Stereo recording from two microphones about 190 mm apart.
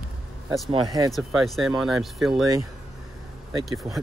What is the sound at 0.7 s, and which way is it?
Speech, 20° right (ahead or behind).